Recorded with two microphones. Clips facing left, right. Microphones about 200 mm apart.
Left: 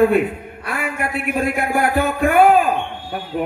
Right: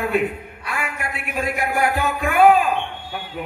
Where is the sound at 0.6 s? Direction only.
55° left (ahead or behind).